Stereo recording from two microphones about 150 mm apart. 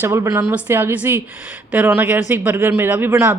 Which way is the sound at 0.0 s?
20° right (ahead or behind).